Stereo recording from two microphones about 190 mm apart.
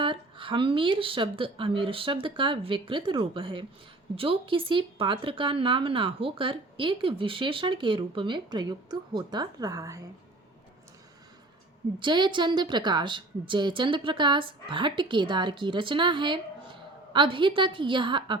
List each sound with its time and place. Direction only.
0.0 s speech: 25° right (ahead or behind)
11.9 s speech: 25° right (ahead or behind)